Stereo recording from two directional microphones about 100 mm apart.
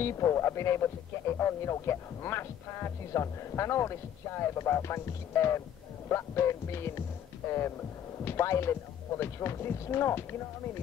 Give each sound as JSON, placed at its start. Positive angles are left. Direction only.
{"t": 0.0, "sound": "speech", "side_deg": 30}